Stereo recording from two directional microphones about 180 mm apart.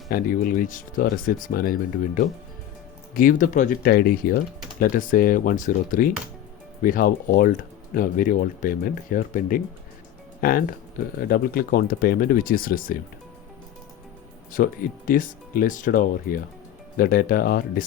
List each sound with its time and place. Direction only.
0.1 s speech: 50° left (ahead or behind)
14.5 s speech: 50° left (ahead or behind)